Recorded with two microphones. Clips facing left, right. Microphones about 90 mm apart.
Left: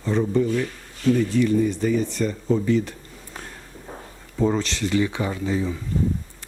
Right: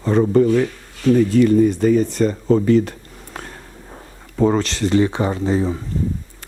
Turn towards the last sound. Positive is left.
turn(degrees=-40)  # may be behind; listen again after turning